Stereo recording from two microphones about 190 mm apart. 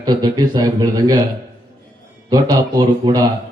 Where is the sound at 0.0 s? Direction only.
20° right (ahead or behind).